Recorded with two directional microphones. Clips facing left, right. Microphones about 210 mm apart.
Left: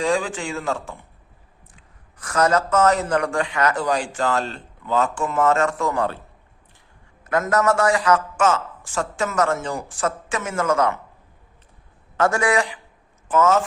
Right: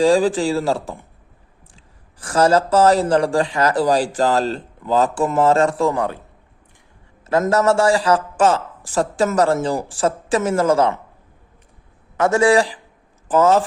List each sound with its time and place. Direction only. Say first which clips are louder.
0.0 s speech: right 8 dB; 35° right (ahead or behind)
5.9 s a man's voice: right 2 dB; 20° right (ahead or behind)
7.3 s speech: right 3 dB; 30° right (ahead or behind)
12.1 s a man's voice: right 5 dB; 20° right (ahead or behind)